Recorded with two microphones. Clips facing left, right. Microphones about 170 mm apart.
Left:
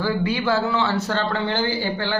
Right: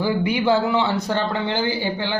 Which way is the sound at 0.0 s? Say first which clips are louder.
Right 2 dB; 15° right (ahead or behind).